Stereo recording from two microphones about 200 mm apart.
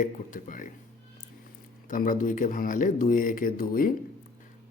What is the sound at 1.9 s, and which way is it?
Speech, 40° left (ahead or behind).